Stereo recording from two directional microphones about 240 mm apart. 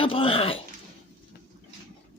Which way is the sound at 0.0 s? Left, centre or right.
Left.